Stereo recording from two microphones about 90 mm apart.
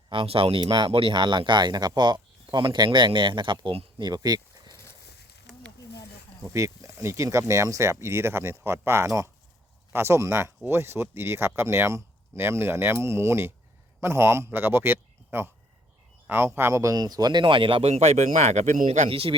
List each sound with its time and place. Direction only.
0.1 s speech: 85° right
4.0 s a sound: 45° right (ahead or behind)
6.5 s speech: 35° right (ahead or behind); by 17.8 s 70° right (ahead or behind)
19.1 s speech: 90° right